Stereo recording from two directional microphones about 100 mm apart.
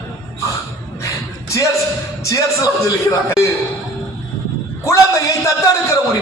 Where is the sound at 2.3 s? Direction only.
35° left (ahead or behind).